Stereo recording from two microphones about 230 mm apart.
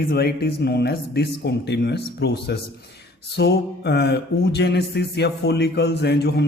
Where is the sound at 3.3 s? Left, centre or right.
Left.